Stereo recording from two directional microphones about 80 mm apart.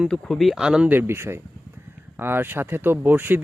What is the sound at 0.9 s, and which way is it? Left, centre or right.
Speech, right.